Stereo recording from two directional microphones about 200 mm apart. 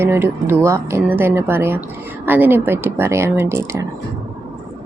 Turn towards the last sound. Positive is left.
turn(degrees=-15)  # may be behind; listen again after turning